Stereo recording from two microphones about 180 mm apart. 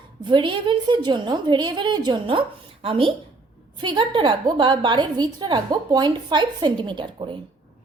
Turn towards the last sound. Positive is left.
turn(degrees=-25)  # may be behind; listen again after turning